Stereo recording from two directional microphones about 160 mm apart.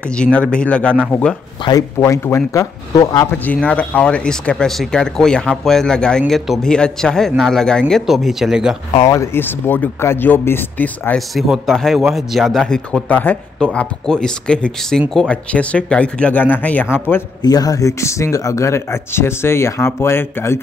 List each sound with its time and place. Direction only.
0.1 s speech: 5° left (ahead or behind)
1.6 s a man's voice: 25° left (ahead or behind); by 8.7 s 5° right (ahead or behind)
8.9 s speech: 20° left (ahead or behind)
11.1 s a man's voice: centre (ahead or behind)
17.4 s speech: 25° left (ahead or behind)